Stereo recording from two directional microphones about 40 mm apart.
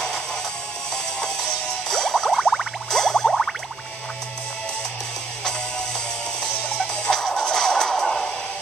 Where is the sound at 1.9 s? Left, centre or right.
Centre.